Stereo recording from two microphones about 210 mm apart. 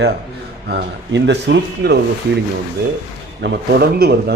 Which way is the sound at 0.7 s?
55° right (ahead or behind).